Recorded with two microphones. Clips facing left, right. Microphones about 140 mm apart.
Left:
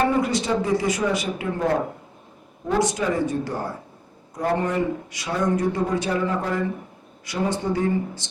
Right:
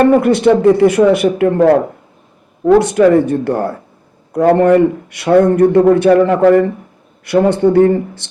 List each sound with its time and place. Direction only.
0.0 s a man's voice: 60° right (ahead or behind)